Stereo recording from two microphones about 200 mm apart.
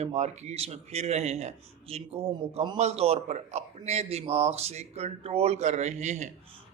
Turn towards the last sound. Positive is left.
turn(degrees=-35)  # may be behind; listen again after turning